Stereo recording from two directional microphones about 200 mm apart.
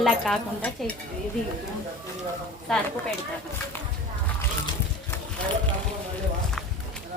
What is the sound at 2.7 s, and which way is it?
Speech, 5° left (ahead or behind).